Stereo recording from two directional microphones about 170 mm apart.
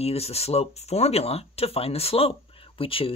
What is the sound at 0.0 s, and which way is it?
Speech, 35° left (ahead or behind).